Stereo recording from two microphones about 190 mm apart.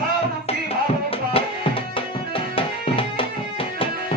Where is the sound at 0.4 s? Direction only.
30° left (ahead or behind).